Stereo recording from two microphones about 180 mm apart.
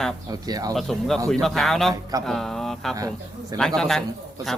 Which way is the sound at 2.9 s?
20° right (ahead or behind).